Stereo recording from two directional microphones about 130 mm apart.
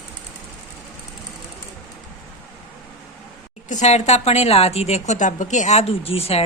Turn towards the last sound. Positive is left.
turn(degrees=50)  # may be behind; listen again after turning